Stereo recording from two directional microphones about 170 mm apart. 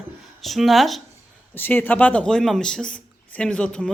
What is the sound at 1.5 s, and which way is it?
Speech, 10° left (ahead or behind).